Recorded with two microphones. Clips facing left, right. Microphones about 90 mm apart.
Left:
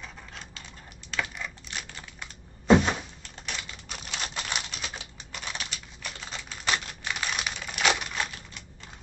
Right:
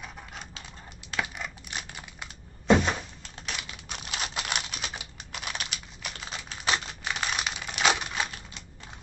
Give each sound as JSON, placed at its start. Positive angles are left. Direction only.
{"t": 0.0, "sound": "a sound", "side_deg": -10}
{"t": 1.1, "sound": "computer keyboard", "side_deg": -15}
{"t": 2.7, "sound": "thunk", "side_deg": 0}
{"t": 3.9, "sound": "computer keyboard", "side_deg": -5}